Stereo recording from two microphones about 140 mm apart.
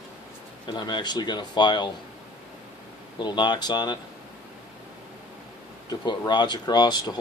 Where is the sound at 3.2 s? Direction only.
30° left (ahead or behind).